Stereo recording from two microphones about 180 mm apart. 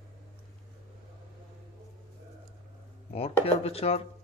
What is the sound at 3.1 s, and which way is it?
Speech, 35° left (ahead or behind).